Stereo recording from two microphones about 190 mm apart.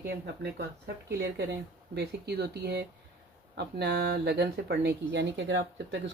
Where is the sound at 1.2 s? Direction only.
60° right (ahead or behind).